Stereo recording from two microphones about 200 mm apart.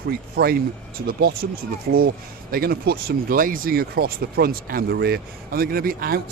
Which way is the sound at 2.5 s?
50° right (ahead or behind).